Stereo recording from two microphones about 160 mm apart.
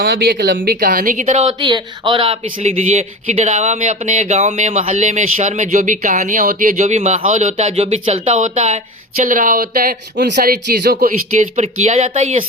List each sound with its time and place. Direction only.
0.0 s speech: 75° right (ahead or behind); by 1.2 s 55° right (ahead or behind)
1.2 s speech: 40° right (ahead or behind)
1.5 s speech: 30° right (ahead or behind); by 11.4 s 65° right (ahead or behind)
11.5 s speech: 45° right (ahead or behind)